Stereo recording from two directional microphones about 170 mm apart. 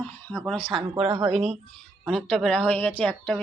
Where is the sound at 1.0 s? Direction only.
30° right (ahead or behind).